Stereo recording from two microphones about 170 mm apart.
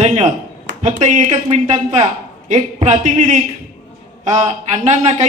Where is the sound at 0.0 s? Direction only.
40° right (ahead or behind).